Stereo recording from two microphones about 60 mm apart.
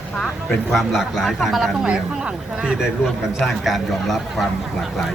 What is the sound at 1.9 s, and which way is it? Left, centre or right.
Speech, centre.